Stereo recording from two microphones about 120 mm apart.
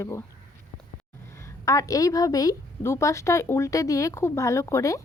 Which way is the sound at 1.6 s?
25° left (ahead or behind).